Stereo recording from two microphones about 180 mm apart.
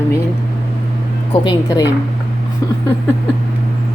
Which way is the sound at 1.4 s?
20° left (ahead or behind).